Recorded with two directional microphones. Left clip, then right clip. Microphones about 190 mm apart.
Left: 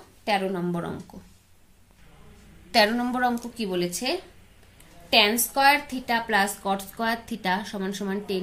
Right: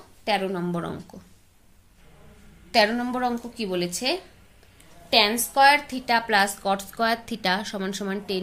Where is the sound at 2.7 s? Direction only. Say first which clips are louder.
Even; 10° right (ahead or behind).